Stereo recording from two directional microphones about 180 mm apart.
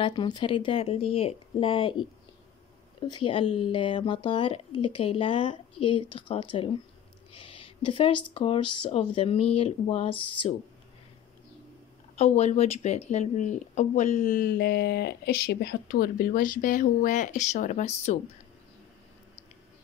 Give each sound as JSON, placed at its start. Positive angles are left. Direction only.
{"t": 0.0, "sound": "speech", "side_deg": 25}
{"t": 12.2, "sound": "speech", "side_deg": 35}